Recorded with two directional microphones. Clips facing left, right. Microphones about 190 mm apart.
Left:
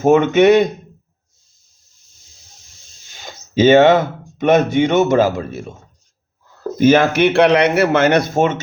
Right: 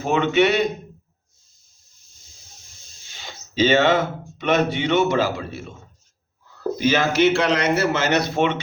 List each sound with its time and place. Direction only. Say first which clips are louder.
0.0 s speech: left 7 dB; 45° left (ahead or behind)
3.2 s speech: left 7 dB; 50° left (ahead or behind)
6.7 s a man's voice: left 7 dB; 50° left (ahead or behind)